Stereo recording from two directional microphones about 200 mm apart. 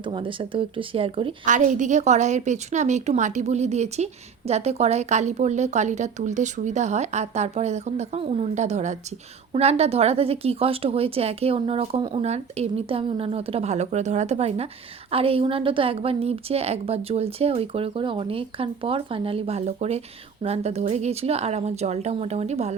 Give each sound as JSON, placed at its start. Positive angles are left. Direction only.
{"t": 0.0, "sound": "a woman's voice", "side_deg": -25}
{"t": 1.5, "sound": "a woman's voice", "side_deg": -40}